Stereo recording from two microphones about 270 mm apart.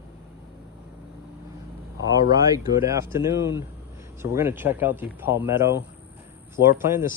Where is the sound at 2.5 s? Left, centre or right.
Centre.